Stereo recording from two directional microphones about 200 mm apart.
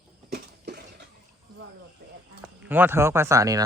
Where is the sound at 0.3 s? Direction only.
55° right (ahead or behind).